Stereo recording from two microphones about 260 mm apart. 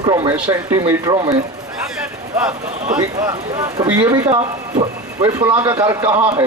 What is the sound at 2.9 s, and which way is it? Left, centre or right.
Speech, centre.